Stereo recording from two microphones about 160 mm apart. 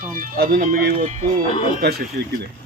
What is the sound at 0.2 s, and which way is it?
Speech, 60° right (ahead or behind).